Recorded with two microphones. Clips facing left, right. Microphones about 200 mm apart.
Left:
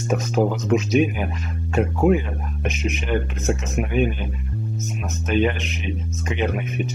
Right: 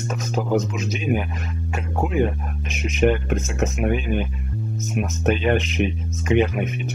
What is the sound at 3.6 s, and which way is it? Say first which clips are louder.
Speech: right 2 dB; 50° right (ahead or behind).